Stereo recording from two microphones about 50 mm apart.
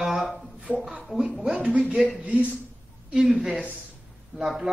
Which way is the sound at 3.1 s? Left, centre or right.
Centre.